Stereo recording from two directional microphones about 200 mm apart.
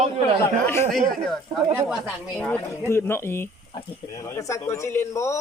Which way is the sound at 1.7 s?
10° right (ahead or behind).